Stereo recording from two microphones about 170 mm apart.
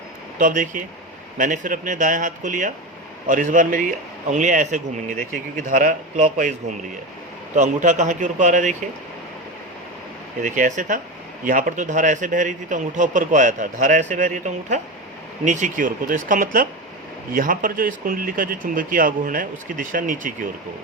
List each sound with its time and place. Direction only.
0.3 s a man's voice: 50° right (ahead or behind)
10.4 s a man's voice: 50° right (ahead or behind)